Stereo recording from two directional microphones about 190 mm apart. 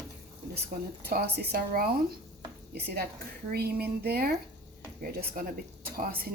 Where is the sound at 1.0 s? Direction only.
55° right (ahead or behind).